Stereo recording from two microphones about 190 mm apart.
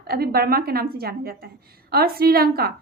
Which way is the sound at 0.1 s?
55° right (ahead or behind).